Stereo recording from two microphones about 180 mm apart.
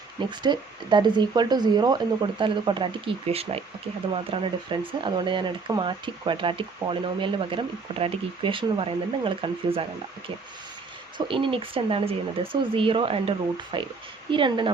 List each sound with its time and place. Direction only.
0.2 s speech: 25° right (ahead or behind)
11.3 s speech: 30° right (ahead or behind)